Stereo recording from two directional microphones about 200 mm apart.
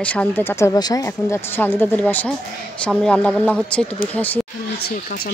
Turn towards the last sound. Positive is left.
turn(degrees=50)  # may be behind; listen again after turning